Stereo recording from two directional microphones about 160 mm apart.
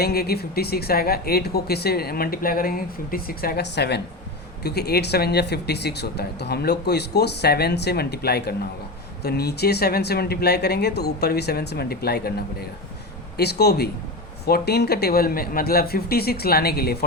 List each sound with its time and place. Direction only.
0.0 s speech: 80° left
13.3 s speech: 90° left